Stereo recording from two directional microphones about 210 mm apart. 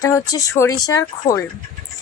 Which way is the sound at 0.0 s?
15° left (ahead or behind).